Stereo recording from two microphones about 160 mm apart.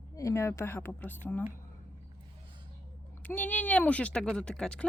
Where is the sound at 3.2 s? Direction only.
10° left (ahead or behind).